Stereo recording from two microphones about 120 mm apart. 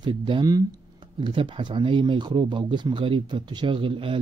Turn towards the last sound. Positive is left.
turn(degrees=-50)  # may be behind; listen again after turning